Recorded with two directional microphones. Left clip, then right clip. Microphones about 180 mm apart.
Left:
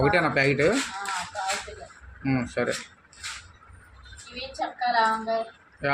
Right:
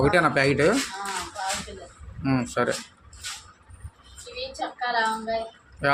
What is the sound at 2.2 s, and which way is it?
Speech, 10° right (ahead or behind).